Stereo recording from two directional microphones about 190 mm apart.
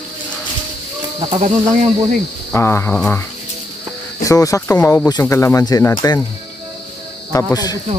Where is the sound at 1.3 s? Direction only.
35° right (ahead or behind).